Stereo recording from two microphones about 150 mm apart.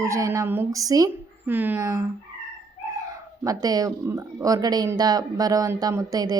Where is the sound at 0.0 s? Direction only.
20° right (ahead or behind).